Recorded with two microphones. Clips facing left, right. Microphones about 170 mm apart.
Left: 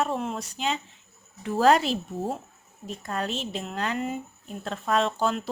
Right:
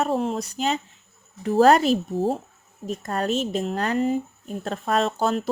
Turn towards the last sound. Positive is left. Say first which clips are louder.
# right 3 dB
turn(degrees=-40)  # may be behind; listen again after turning